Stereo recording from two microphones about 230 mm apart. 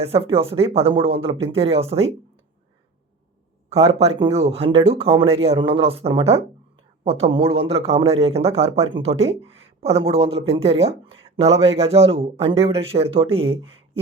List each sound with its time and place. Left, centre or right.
0.0 s a man's voice: right
3.7 s a man's voice: right